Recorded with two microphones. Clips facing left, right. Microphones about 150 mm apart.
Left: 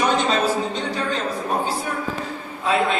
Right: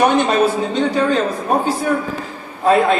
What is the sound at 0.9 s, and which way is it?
A man's voice, 55° right (ahead or behind).